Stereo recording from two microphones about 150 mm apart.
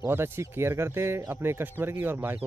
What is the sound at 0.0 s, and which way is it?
Speech, 15° right (ahead or behind).